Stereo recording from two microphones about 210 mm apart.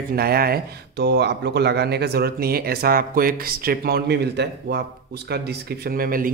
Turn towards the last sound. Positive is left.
turn(degrees=-45)  # may be behind; listen again after turning